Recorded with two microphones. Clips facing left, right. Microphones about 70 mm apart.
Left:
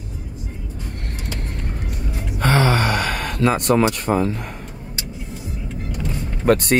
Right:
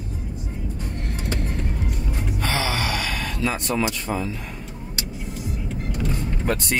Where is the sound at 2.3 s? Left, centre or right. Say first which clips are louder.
Left 8 dB; left.